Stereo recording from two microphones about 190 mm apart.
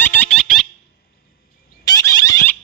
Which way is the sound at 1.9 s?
15° left (ahead or behind).